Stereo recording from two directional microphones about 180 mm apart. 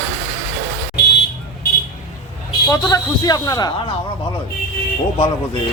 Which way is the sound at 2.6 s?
20° left (ahead or behind).